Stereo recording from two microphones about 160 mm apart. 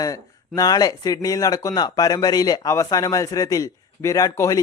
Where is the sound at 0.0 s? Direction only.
20° left (ahead or behind).